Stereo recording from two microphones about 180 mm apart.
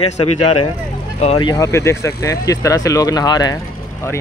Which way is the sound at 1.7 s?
15° left (ahead or behind).